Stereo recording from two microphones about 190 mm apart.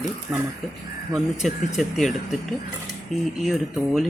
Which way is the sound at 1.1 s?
Centre (ahead or behind).